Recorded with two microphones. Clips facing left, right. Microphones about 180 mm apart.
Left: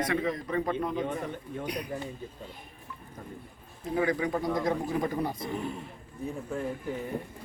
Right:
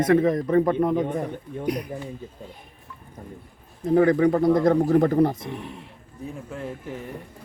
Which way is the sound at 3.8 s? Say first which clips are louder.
Right 10 dB; 50° right (ahead or behind).